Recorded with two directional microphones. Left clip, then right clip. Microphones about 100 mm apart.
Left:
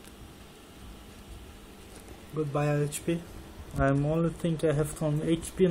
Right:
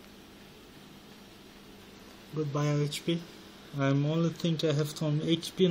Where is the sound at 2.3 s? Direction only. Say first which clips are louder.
Left 3 dB; 25° right (ahead or behind).